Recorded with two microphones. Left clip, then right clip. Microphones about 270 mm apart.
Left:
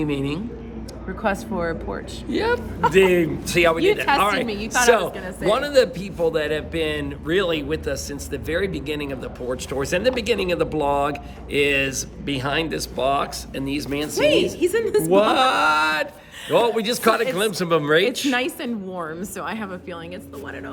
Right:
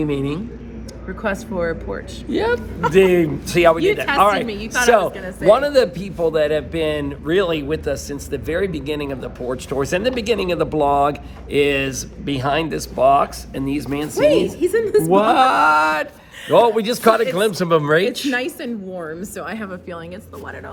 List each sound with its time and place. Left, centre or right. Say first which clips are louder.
0.0 s a man's voice: right 3 dB; centre
1.0 s speech: even; centre
2.3 s a man's voice: right 3 dB; centre
4.4 s speech: right 1 dB; centre
4.9 s a man's voice: right 5 dB; centre
14.7 s a man's voice: right 4 dB; centre
15.0 s mantra: right 2 dB; centre
16.5 s a man's voice: right 5 dB; centre
18.3 s speech: right 1 dB; centre